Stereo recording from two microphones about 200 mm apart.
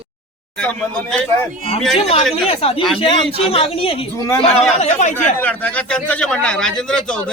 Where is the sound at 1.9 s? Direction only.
30° left (ahead or behind).